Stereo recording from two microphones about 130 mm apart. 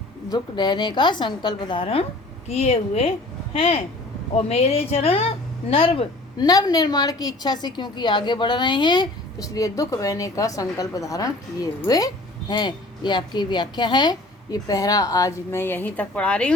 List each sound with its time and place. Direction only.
0.3 s a woman's voice: 35° left (ahead or behind)
6.3 s a woman's voice: 30° left (ahead or behind); by 16.6 s 10° left (ahead or behind)